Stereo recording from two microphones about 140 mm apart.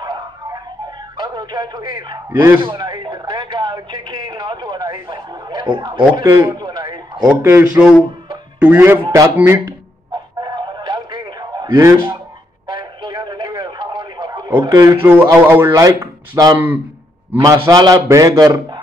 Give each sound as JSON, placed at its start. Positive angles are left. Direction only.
{"t": 0.0, "sound": "a sound", "side_deg": -30}
{"t": 1.1, "sound": "a man's voice", "side_deg": -30}
{"t": 2.3, "sound": "speech", "side_deg": -15}
{"t": 2.6, "sound": "speech", "side_deg": -35}
{"t": 6.2, "sound": "speech", "side_deg": -15}
{"t": 6.8, "sound": "a sound", "side_deg": -30}
{"t": 7.4, "sound": "speech", "side_deg": -15}
{"t": 10.4, "sound": "a sound", "side_deg": -30}
{"t": 12.6, "sound": "radio", "side_deg": -30}
{"t": 14.6, "sound": "speech", "side_deg": -25}
{"t": 16.5, "sound": "speech", "side_deg": -10}
{"t": 17.4, "sound": "speech", "side_deg": -25}